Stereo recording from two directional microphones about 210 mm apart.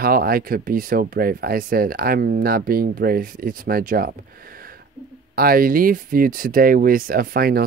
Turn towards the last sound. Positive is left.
turn(degrees=-45)  # may be behind; listen again after turning